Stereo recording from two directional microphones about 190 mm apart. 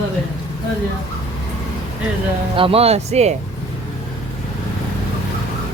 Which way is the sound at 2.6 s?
30° right (ahead or behind).